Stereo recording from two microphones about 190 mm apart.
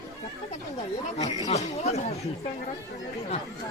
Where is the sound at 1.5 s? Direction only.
35° left (ahead or behind).